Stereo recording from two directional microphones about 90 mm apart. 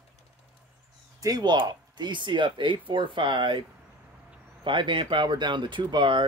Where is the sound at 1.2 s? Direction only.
45° right (ahead or behind).